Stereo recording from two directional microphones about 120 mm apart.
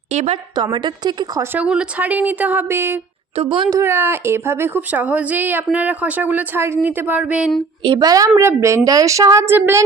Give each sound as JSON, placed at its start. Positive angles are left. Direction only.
{"t": 0.1, "sound": "a sound", "side_deg": -70}
{"t": 0.5, "sound": "a woman's voice", "side_deg": -40}
{"t": 1.5, "sound": "speech", "side_deg": -10}
{"t": 3.3, "sound": "a woman's voice", "side_deg": -45}
{"t": 3.7, "sound": "speech", "side_deg": -25}
{"t": 7.8, "sound": "a woman's voice", "side_deg": -35}